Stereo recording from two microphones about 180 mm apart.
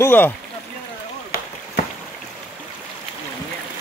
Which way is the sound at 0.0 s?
10° left (ahead or behind).